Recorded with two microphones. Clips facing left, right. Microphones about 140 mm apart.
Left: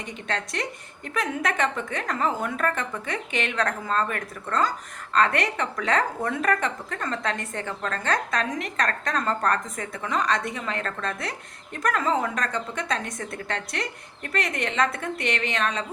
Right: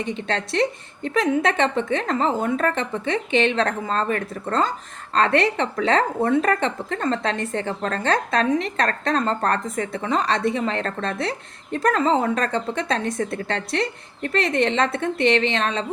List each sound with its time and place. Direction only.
0.0 s a woman's voice: 30° right (ahead or behind)